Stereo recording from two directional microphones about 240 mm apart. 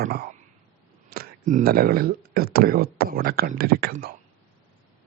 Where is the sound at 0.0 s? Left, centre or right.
Right.